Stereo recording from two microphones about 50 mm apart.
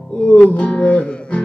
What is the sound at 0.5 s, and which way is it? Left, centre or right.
Music, left.